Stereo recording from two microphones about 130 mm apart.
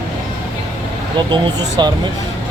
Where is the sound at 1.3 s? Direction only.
30° right (ahead or behind).